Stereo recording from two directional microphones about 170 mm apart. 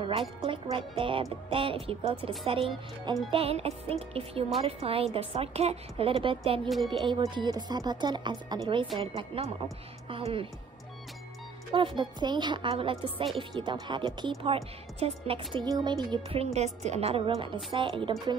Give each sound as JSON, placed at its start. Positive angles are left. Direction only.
{"t": 0.4, "sound": "a woman's voice", "side_deg": -30}
{"t": 11.7, "sound": "a woman's voice", "side_deg": -30}
{"t": 16.5, "sound": "a woman's voice", "side_deg": -40}